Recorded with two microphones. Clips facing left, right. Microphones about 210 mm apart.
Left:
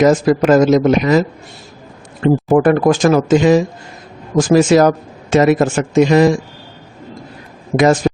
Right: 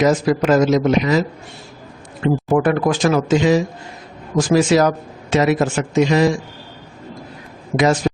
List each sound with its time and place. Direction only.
0.0 s speech: 50° left (ahead or behind)
2.2 s speech: 45° left (ahead or behind)
8.0 s a sound: 50° left (ahead or behind)